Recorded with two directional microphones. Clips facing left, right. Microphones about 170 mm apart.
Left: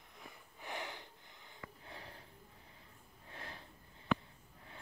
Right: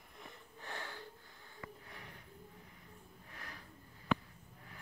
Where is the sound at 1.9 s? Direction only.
30° left (ahead or behind).